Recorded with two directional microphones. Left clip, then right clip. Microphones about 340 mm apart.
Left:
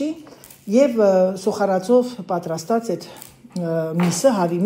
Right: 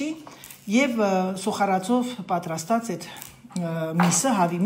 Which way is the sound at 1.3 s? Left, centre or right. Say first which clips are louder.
Left 4 dB; centre.